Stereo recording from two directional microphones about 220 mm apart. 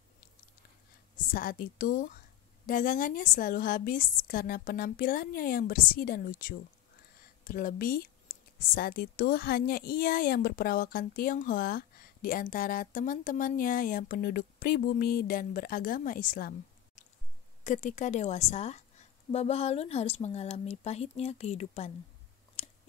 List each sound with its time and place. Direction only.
1.3 s a woman's voice: 40° left (ahead or behind)